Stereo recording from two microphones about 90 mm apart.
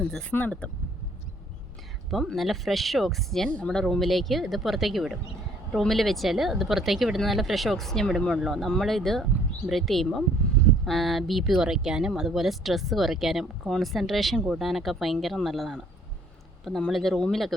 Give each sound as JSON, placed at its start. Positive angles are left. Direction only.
{"t": 0.0, "sound": "speech", "side_deg": 10}
{"t": 2.0, "sound": "speech", "side_deg": 0}